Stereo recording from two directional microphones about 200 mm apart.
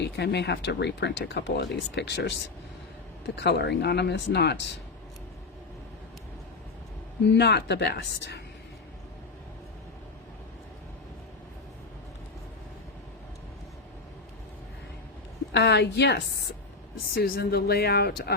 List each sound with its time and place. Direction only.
0.0 s speech: 55° left (ahead or behind)
7.3 s speech: 55° left (ahead or behind)
15.5 s speech: 60° left (ahead or behind)